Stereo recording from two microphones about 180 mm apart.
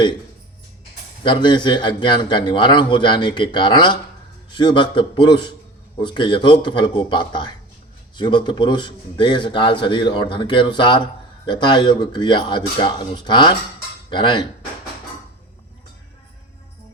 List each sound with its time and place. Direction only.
1.2 s a man's voice: 25° left (ahead or behind)